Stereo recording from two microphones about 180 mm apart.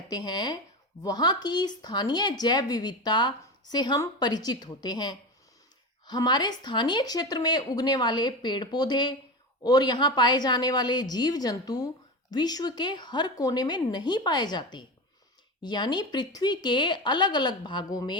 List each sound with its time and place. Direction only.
0.1 s speech: 25° left (ahead or behind)